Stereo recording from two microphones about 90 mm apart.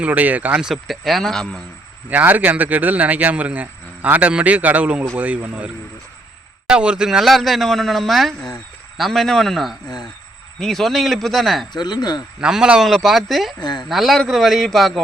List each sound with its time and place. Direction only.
0.0 s speech: 15° right (ahead or behind)
0.6 s speech: centre (ahead or behind)
2.0 s speech: 20° right (ahead or behind)
6.7 s speech: 10° right (ahead or behind)
11.7 s speech: 50° left (ahead or behind)
12.4 s speech: 10° right (ahead or behind)
13.6 s speech: 55° left (ahead or behind)
13.8 s speech: centre (ahead or behind)